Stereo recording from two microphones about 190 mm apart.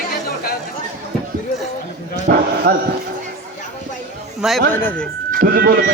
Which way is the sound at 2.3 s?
50° right (ahead or behind).